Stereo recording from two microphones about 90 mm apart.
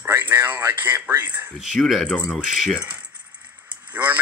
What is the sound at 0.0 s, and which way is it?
Speech, 20° right (ahead or behind).